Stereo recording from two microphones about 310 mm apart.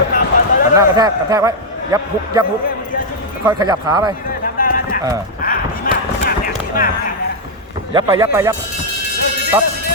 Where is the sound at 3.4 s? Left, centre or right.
Centre.